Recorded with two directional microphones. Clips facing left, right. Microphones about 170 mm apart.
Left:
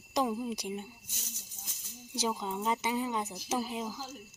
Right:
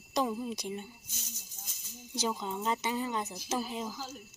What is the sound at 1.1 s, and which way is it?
Speech, 65° left (ahead or behind).